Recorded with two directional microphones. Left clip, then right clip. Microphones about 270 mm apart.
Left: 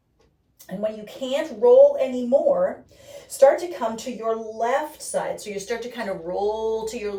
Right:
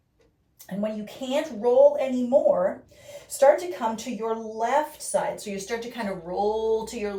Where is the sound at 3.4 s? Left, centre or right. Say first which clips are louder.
Left 2 dB; centre.